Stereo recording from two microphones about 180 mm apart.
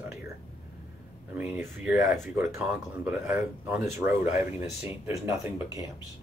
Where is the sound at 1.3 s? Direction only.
10° right (ahead or behind).